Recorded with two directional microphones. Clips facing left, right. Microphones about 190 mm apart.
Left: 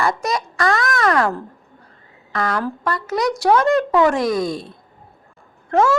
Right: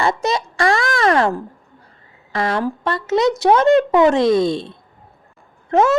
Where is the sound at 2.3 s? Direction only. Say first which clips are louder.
Right 2 dB; 25° right (ahead or behind).